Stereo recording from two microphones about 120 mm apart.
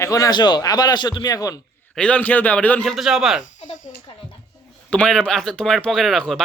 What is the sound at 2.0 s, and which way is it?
Speech, 10° left (ahead or behind).